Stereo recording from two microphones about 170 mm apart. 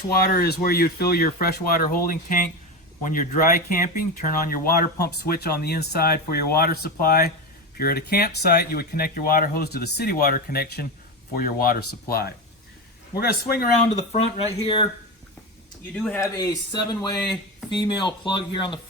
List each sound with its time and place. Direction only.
0.1 s speech: 65° left (ahead or behind)
14.6 s speech: 30° left (ahead or behind)
16.0 s speech: 10° left (ahead or behind); by 18.8 s 30° left (ahead or behind)